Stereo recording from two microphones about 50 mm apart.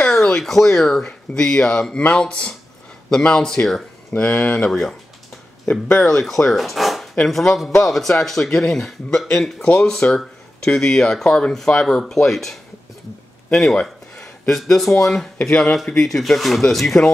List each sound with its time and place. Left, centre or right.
0.0 s a sound: centre
0.4 s speech: centre
4.6 s speech: centre
5.9 s speech: centre
13.7 s a sound: centre
14.8 s speech: centre